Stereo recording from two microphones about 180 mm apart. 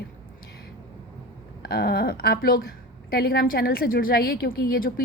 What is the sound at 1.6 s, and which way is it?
A woman's voice, 60° left (ahead or behind).